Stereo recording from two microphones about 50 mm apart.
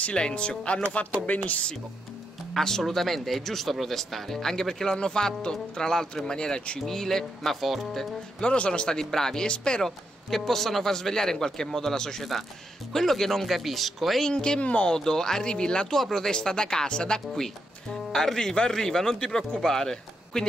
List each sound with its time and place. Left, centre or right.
0.0 s speech: left
1.2 s speech: left
2.5 s a man's voice: centre
6.8 s speech: centre
8.4 s a man's voice: centre
9.8 s a man's voice: centre
14.2 s a man's voice: centre
15.0 s a man's voice: centre